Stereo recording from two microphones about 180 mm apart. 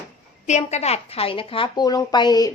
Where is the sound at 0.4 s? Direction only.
40° left (ahead or behind).